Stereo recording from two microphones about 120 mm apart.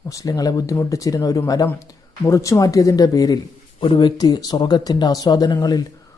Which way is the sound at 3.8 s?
40° left (ahead or behind).